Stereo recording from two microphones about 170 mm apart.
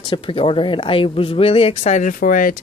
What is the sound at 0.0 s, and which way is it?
Speech, 30° left (ahead or behind).